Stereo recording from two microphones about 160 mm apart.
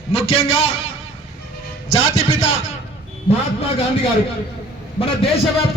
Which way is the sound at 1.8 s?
45° left (ahead or behind).